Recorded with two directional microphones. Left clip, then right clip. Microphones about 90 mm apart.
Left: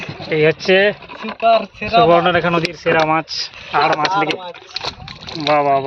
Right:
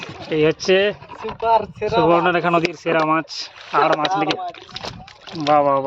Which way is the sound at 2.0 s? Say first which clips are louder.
Left 2 dB; 35° right (ahead or behind).